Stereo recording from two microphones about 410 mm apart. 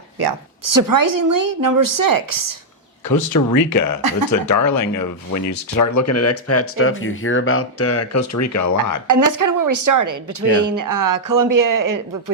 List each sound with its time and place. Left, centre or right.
0.2 s a woman's voice: right
3.1 s speech: left
4.4 s speech: left
9.0 s a woman's voice: right